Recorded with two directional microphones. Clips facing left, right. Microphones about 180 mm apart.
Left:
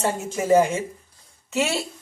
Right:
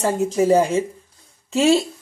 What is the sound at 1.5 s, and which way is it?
Speech, 30° right (ahead or behind).